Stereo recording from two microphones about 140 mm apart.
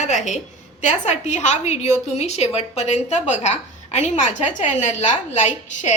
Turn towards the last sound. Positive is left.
turn(degrees=60)  # may be behind; listen again after turning